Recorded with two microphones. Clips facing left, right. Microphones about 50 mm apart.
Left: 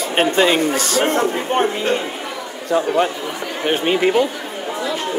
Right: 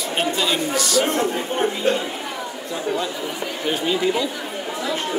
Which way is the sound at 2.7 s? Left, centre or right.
Left.